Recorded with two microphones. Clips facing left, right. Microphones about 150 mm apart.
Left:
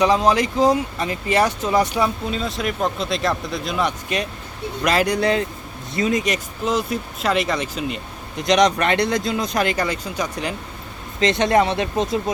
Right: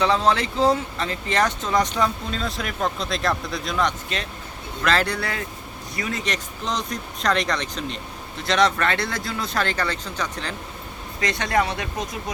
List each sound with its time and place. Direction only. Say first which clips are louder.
0.0 s speech: left 3 dB; 15° left (ahead or behind)
11.2 s speech: left 6 dB; 25° left (ahead or behind)